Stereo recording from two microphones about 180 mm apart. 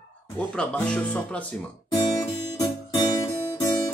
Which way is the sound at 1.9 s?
20° left (ahead or behind).